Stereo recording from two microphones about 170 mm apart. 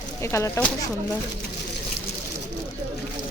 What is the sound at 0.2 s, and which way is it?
Speech, 15° left (ahead or behind).